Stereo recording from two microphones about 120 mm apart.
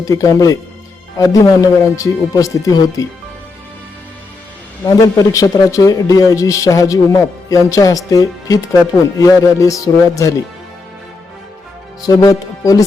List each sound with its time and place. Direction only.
0.0 s a man's voice: 25° left (ahead or behind)
4.8 s a man's voice: 30° left (ahead or behind)
12.0 s a man's voice: 30° left (ahead or behind)